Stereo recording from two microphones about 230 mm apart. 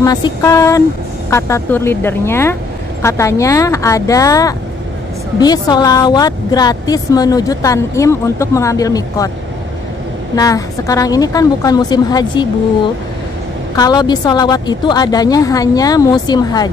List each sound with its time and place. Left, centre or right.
0.0 s speech: centre
10.3 s speech: centre
13.7 s speech: centre